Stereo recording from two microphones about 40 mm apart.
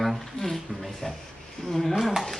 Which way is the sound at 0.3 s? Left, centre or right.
Centre.